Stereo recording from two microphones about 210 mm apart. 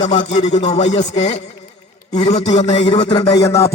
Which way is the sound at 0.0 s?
35° left (ahead or behind).